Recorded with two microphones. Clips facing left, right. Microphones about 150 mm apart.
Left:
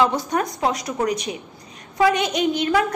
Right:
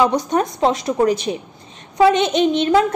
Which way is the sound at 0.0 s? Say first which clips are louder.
Right 3 dB; 20° right (ahead or behind).